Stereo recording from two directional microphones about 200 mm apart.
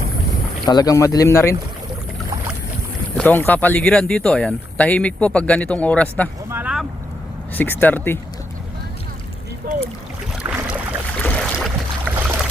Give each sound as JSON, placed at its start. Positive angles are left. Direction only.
{"t": 0.7, "sound": "speech", "side_deg": 20}
{"t": 3.2, "sound": "speech", "side_deg": 10}
{"t": 6.5, "sound": "vehicle", "side_deg": -5}
{"t": 7.5, "sound": "speech", "side_deg": 10}
{"t": 9.6, "sound": "boat", "side_deg": -45}
{"t": 10.4, "sound": "boat", "side_deg": -10}
{"t": 11.2, "sound": "boat", "side_deg": 5}
{"t": 12.0, "sound": "boat", "side_deg": -10}